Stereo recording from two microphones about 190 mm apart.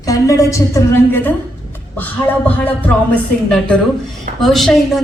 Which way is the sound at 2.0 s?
5° left (ahead or behind).